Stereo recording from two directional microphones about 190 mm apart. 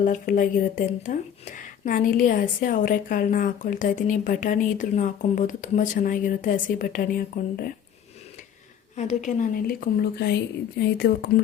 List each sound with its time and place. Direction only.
0.0 s a woman's voice: 45° left (ahead or behind)
9.0 s speech: 40° left (ahead or behind); by 11.4 s 55° left (ahead or behind)